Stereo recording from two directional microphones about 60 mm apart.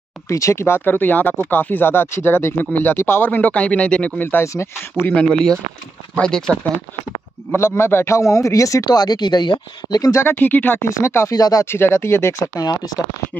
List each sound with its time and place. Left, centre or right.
0.3 s speech: left; by 4.1 s centre
4.2 s speech: left
4.5 s speech: left
5.1 s speech: centre
7.5 s a man's voice: left
9.8 s speech: left
10.2 s speech: left
10.9 s speech: left
11.3 s speech: left
11.6 s speech: left
12.5 s speech: left